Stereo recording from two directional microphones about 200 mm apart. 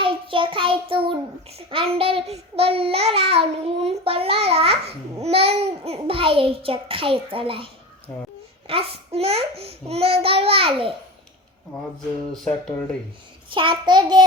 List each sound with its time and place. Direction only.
0.0 s a child's voice: 25° right (ahead or behind)
12.3 s speech: 5° left (ahead or behind)
13.5 s a child's voice: 25° right (ahead or behind)